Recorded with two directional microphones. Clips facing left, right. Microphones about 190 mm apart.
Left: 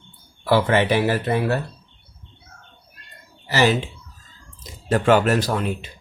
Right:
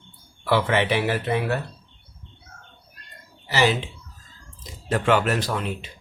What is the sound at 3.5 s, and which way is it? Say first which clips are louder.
Speech: left 3 dB; 45° left (ahead or behind).